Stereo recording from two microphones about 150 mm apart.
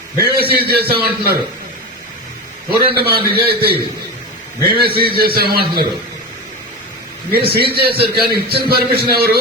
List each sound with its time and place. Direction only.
0.2 s a man's voice: 90° right
2.6 s a man's voice: 90° right
7.3 s a man's voice: 90° right